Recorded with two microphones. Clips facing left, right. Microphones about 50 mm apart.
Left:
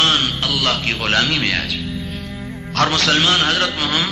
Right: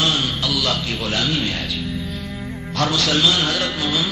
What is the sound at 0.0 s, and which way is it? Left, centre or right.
Radio, left.